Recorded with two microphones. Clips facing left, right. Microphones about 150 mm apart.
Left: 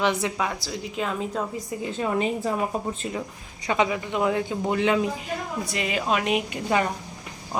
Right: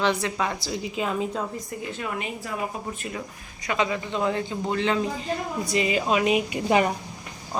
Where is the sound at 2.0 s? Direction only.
30° left (ahead or behind).